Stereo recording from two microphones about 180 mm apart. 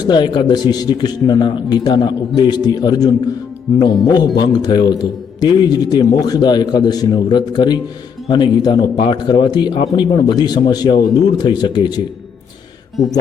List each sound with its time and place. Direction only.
0.0 s a man's voice: 25° left (ahead or behind)